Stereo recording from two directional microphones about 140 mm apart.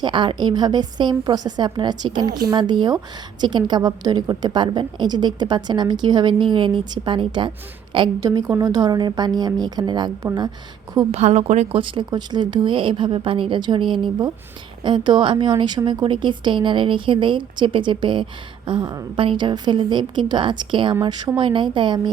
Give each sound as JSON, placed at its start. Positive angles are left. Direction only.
{"t": 0.0, "sound": "a woman's voice", "side_deg": -35}
{"t": 11.1, "sound": "a woman's voice", "side_deg": -50}